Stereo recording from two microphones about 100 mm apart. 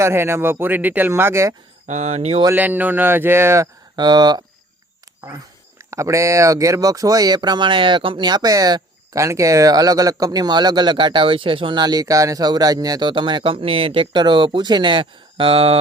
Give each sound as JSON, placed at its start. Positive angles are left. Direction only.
{"t": 0.0, "sound": "speech", "side_deg": -25}
{"t": 1.9, "sound": "speech", "side_deg": -90}
{"t": 2.6, "sound": "speech", "side_deg": -15}
{"t": 3.9, "sound": "speech", "side_deg": -45}
{"t": 5.9, "sound": "speech", "side_deg": -30}